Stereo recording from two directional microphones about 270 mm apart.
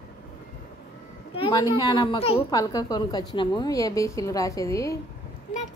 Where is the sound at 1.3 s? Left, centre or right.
Centre.